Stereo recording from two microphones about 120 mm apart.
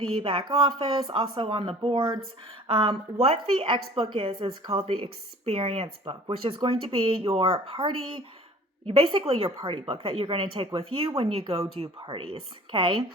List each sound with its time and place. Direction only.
0.2 s speech: 50° right (ahead or behind)